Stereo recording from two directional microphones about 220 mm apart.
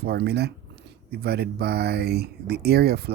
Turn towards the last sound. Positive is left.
turn(degrees=-45)  # may be behind; listen again after turning